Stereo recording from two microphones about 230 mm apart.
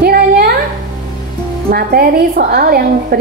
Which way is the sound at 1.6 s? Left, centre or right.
Right.